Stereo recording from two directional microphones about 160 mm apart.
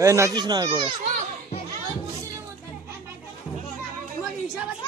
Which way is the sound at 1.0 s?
50° right (ahead or behind).